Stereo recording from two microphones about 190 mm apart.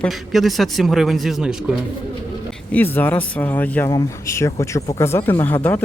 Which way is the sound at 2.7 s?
10° left (ahead or behind).